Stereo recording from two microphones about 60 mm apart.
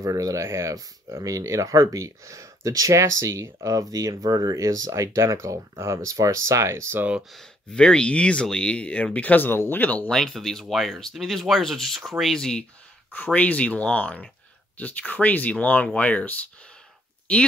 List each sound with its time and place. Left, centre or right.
0.0 s speech: right
0.4 s speech: right
7.3 s speech: centre
10.0 s speech: centre
13.1 s speech: left